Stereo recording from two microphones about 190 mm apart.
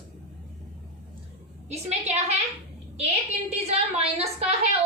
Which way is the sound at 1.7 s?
35° right (ahead or behind).